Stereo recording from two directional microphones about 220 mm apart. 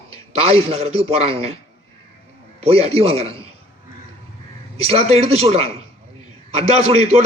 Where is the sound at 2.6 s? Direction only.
25° right (ahead or behind).